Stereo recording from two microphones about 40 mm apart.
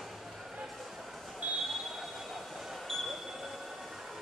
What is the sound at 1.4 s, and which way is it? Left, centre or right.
Fire alarm, right.